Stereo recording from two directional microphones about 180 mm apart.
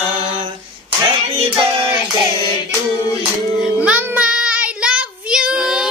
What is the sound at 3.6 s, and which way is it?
Child singing, 5° right (ahead or behind).